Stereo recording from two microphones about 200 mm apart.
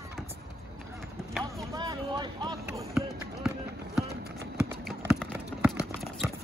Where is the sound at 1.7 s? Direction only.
20° right (ahead or behind).